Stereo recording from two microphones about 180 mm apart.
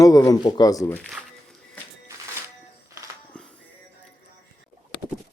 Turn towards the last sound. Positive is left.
turn(degrees=5)  # may be behind; listen again after turning